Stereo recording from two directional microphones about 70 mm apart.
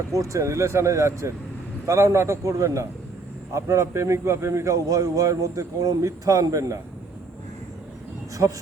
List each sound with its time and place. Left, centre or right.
0.1 s a man's voice: right